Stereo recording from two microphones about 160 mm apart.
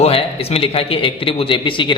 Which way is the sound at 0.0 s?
35° left (ahead or behind).